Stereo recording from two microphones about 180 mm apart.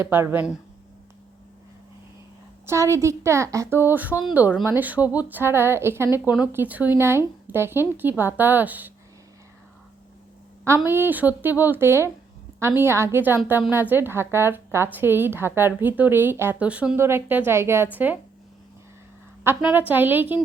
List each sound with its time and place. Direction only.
0.0 s a woman's voice: 10° right (ahead or behind)
2.6 s a woman's voice: 15° right (ahead or behind)
10.8 s a woman's voice: 10° right (ahead or behind)
19.5 s a woman's voice: 10° right (ahead or behind)